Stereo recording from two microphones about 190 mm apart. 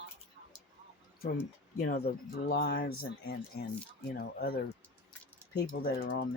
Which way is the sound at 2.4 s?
55° left (ahead or behind).